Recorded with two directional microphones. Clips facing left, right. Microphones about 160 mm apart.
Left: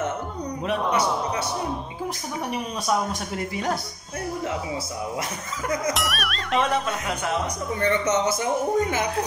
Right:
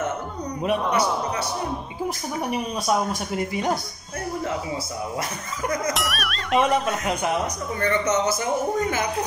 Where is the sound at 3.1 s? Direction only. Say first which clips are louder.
Right 3 dB; 15° right (ahead or behind).